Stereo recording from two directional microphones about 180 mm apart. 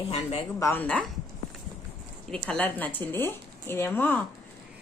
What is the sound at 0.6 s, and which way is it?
Speech, 10° left (ahead or behind).